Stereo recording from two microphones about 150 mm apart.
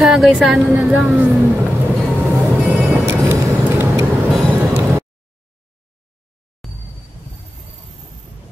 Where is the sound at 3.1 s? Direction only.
15° right (ahead or behind).